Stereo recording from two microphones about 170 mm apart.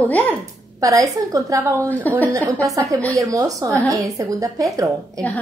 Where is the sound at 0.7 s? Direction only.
20° right (ahead or behind).